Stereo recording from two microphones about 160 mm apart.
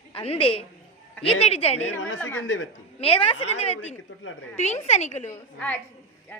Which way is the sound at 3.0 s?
35° left (ahead or behind).